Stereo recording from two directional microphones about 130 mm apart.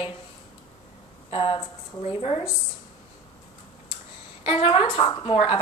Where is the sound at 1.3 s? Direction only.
40° left (ahead or behind).